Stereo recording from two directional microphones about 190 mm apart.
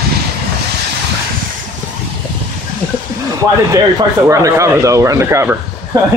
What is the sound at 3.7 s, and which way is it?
Speech, 15° right (ahead or behind).